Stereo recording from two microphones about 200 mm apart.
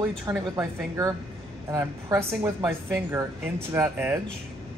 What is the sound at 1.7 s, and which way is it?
Speech, 15° right (ahead or behind).